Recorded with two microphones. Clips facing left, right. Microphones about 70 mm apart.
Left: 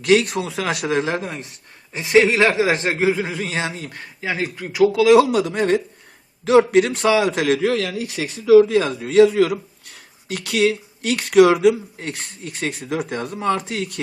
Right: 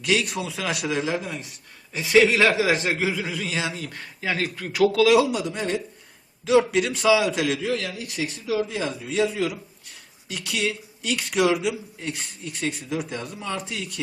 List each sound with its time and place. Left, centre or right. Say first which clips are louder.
0.0 s speech: left 7 dB; left
1.9 s a man's voice: left 3 dB; left
3.7 s speech: left 1 dB; left
3.9 s speech: left 2 dB; centre
5.2 s speech: left 6 dB; left
7.7 s a man's voice: left 6 dB; left